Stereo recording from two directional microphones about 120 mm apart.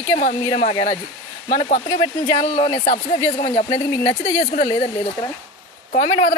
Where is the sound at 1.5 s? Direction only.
80° left.